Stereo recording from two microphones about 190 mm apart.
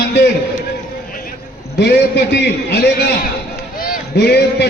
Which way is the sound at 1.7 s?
60° left (ahead or behind).